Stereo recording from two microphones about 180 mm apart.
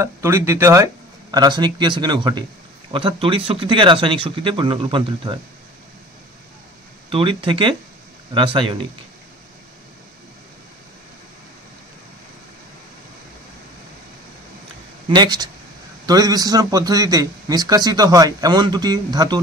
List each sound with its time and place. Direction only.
0.0 s a man's voice: 15° right (ahead or behind)
7.1 s a man's voice: 30° right (ahead or behind)
15.0 s a man's voice: 25° right (ahead or behind)